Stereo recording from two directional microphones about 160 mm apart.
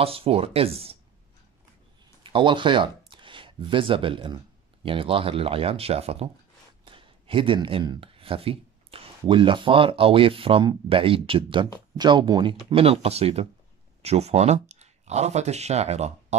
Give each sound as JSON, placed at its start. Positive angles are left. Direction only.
{"t": 0.0, "sound": "speech", "side_deg": -35}
{"t": 2.2, "sound": "speech", "side_deg": -30}
{"t": 3.1, "sound": "shuffling cards", "side_deg": -30}
{"t": 4.8, "sound": "speech", "side_deg": -35}
{"t": 6.8, "sound": "a sound", "side_deg": -35}
{"t": 9.3, "sound": "speech", "side_deg": -30}